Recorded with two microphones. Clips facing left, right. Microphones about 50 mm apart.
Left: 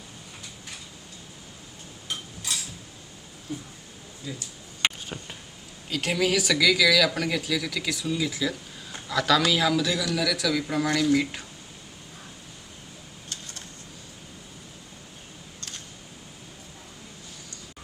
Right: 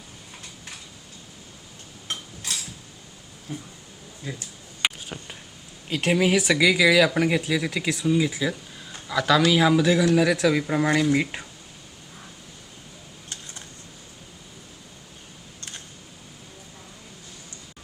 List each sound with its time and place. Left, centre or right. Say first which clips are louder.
3.5 s speech: even; right
4.8 s a sound: even; centre
5.9 s speech: right 4 dB; right